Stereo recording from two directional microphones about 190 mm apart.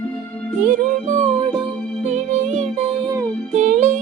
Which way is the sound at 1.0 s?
40° right (ahead or behind).